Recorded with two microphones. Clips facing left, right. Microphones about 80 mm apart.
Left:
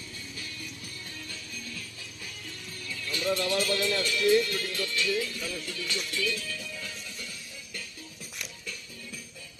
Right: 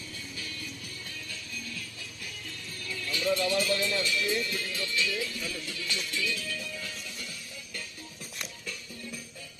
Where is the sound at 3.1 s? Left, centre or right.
Left.